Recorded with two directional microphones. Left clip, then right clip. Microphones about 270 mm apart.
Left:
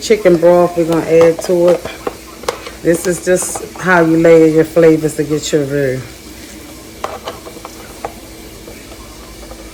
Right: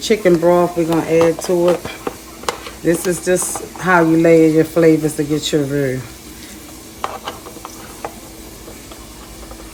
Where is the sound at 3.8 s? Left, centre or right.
Centre.